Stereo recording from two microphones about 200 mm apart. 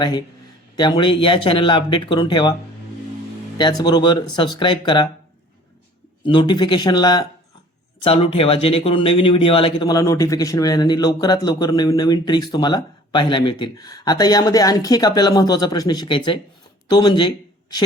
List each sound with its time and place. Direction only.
0.0 s a man's voice: 20° left (ahead or behind)
3.6 s a man's voice: 20° left (ahead or behind)
6.2 s a man's voice: 25° left (ahead or behind)